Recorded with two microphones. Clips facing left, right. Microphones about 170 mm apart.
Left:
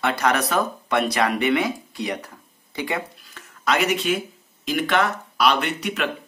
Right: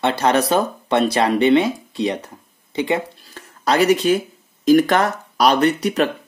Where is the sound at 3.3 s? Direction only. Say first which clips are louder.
Right 5 dB; 35° right (ahead or behind).